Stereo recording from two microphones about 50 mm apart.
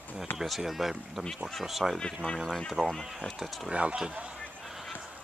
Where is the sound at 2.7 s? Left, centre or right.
Centre.